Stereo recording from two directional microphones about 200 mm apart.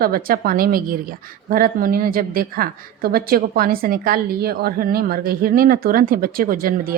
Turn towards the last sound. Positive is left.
turn(degrees=-45)  # may be behind; listen again after turning